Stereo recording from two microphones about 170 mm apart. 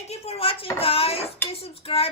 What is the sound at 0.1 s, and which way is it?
Speech, 35° left (ahead or behind).